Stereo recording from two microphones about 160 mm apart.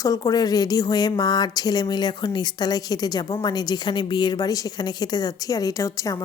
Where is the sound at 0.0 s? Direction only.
20° left (ahead or behind).